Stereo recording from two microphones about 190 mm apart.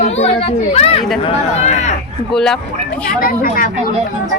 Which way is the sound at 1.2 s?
35° left (ahead or behind).